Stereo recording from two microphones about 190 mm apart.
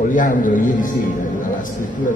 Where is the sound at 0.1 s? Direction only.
45° left (ahead or behind).